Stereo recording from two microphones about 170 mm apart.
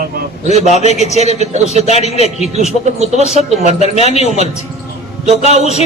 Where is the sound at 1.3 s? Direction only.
40° right (ahead or behind).